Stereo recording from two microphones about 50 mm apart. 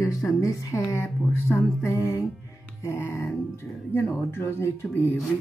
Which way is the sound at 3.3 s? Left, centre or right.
Left.